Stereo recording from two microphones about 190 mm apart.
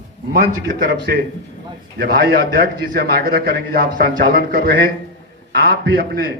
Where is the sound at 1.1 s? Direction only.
60° right (ahead or behind).